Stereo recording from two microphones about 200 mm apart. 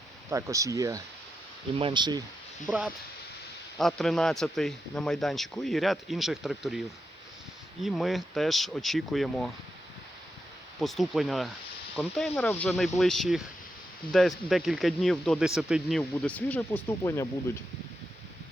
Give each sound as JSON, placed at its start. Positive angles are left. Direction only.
{"t": 0.3, "sound": "speech", "side_deg": -15}
{"t": 2.7, "sound": "speech", "side_deg": -10}
{"t": 3.8, "sound": "speech", "side_deg": 0}
{"t": 10.8, "sound": "speech", "side_deg": 0}